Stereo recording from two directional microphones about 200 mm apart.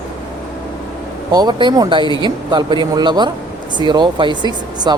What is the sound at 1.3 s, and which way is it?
Speech, 20° right (ahead or behind).